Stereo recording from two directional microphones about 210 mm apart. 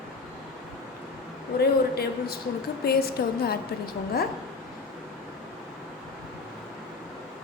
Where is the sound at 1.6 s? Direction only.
50° left (ahead or behind).